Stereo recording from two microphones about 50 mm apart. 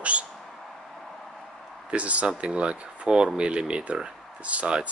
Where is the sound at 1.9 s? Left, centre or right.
Right.